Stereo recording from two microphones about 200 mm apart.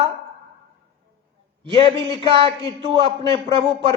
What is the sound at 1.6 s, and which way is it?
A man's voice, 25° right (ahead or behind).